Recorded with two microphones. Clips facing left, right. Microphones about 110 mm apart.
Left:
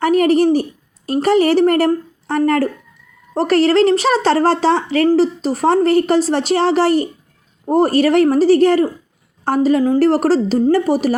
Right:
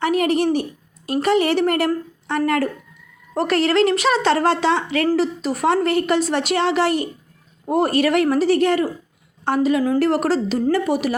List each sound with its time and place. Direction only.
0.0 s a woman's voice: 40° left (ahead or behind)
1.9 s a sound: 40° left (ahead or behind)
2.4 s a woman's voice: 35° left (ahead or behind)